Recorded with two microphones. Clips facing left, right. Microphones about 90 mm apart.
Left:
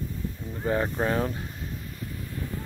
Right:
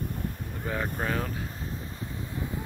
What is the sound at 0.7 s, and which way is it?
Speech, 15° left (ahead or behind).